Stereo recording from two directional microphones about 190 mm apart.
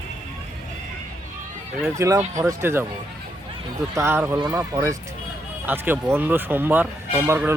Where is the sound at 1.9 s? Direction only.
15° right (ahead or behind).